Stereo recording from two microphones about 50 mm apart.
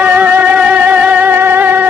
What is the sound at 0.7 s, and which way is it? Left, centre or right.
Music, right.